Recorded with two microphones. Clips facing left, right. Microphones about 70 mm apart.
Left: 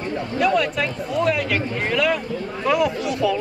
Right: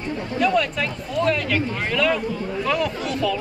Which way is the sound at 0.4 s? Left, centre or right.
Centre.